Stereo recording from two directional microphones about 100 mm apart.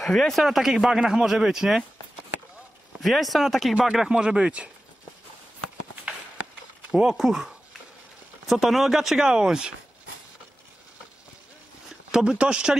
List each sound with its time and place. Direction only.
0.0 s speech: centre (ahead or behind)
3.0 s speech: centre (ahead or behind)
6.9 s speech: 5° right (ahead or behind)
12.1 s speech: 5° right (ahead or behind)